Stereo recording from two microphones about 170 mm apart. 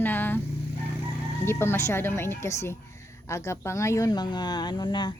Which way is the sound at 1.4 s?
15° left (ahead or behind).